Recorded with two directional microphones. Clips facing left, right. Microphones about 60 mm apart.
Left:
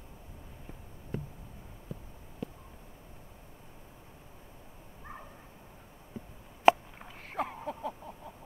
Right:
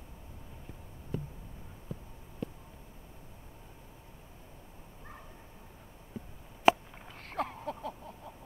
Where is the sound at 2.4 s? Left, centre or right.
Centre.